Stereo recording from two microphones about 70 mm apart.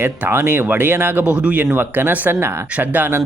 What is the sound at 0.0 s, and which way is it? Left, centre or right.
Speech, right.